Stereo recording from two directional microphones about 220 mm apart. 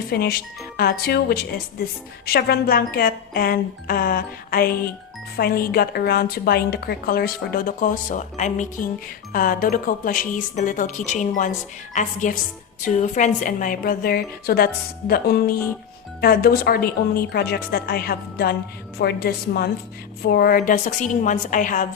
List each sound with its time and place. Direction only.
0.1 s a woman's voice: 45° left (ahead or behind)